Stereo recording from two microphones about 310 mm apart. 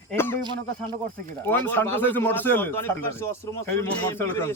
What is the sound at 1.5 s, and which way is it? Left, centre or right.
A man's voice, centre.